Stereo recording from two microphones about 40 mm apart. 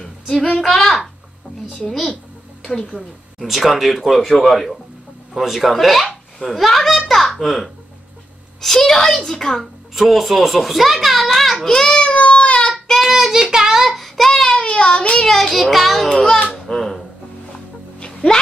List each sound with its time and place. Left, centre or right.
0.0 s a sound: centre
0.6 s a child's voice: centre
2.9 s a woman's voice: right
3.3 s a child's voice: centre
9.9 s a child's voice: centre; by 12.2 s left
12.2 s baby cry: left
12.8 s child singing: centre
13.1 s child singing: centre
14.3 s child singing: centre
14.6 s child singing: left
15.2 s a child's voice: centre
16.1 s a child's voice: centre
17.5 s music: left